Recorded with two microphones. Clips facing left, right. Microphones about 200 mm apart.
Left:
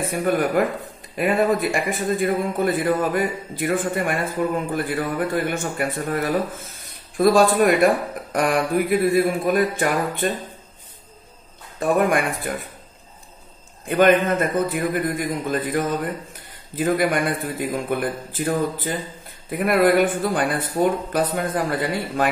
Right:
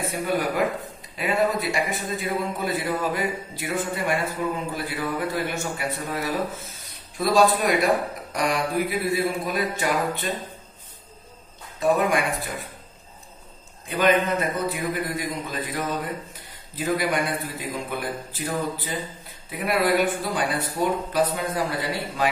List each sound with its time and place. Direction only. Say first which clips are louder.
0.0 s a man's voice: left 4 dB; 50° left (ahead or behind)
11.8 s a man's voice: left 2 dB; 50° left (ahead or behind)
13.8 s a man's voice: left 5 dB; 50° left (ahead or behind)